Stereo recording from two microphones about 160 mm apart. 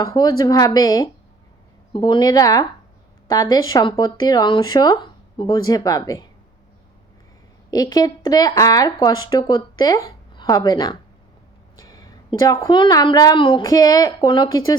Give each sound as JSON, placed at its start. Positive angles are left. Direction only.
{"t": 0.0, "sound": "speech", "side_deg": 20}
{"t": 7.7, "sound": "speech", "side_deg": 25}